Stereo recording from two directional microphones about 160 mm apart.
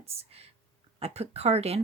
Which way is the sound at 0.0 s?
40° right (ahead or behind).